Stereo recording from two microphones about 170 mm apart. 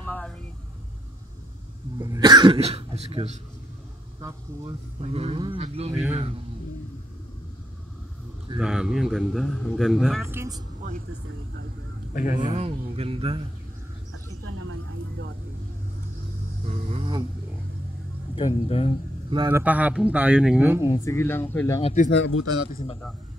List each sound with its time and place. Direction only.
0.0 s vehicle: 10° left (ahead or behind)
2.0 s speech: 25° right (ahead or behind)
5.0 s speech: 35° right (ahead or behind)
8.5 s speech: 5° right (ahead or behind)
10.2 s speech: 15° right (ahead or behind)
12.1 s speech: 55° left (ahead or behind)
12.4 s speech: 35° right (ahead or behind)
16.6 s speech: 35° right (ahead or behind)
18.3 s speech: 35° left (ahead or behind)
19.5 s speech: 10° right (ahead or behind)
20.8 s speech: 20° left (ahead or behind)
21.8 s speech: 45° left (ahead or behind)
22.6 s a man's voice: 60° left (ahead or behind)